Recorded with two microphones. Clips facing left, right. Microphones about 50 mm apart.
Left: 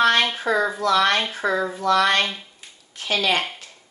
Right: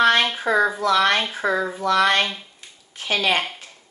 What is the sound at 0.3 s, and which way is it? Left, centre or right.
A woman's voice, centre.